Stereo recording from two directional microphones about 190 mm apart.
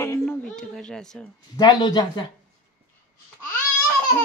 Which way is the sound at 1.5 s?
20° left (ahead or behind).